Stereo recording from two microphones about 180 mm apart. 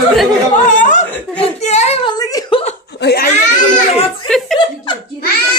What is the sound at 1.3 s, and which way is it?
Child singing, 40° left (ahead or behind).